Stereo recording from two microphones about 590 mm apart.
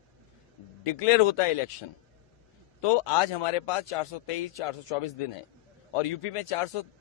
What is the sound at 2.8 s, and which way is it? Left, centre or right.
A man's voice, left.